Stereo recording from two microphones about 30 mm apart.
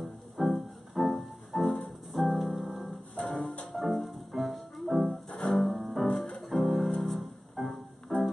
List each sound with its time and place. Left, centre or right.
0.0 s music: centre
3.2 s music: left
3.7 s music: centre